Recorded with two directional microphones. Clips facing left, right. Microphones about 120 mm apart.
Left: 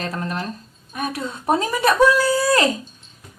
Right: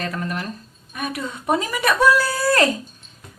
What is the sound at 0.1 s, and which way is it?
Speech, 30° left (ahead or behind).